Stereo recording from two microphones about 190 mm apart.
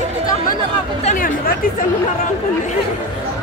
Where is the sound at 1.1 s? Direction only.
45° left (ahead or behind).